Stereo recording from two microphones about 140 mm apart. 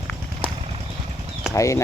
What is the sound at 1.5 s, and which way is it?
Speech, 20° left (ahead or behind).